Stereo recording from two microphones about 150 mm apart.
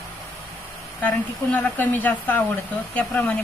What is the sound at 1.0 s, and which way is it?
Speech, 10° left (ahead or behind).